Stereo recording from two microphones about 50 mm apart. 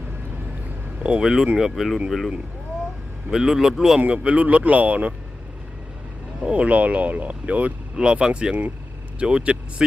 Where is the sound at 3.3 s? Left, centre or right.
Centre.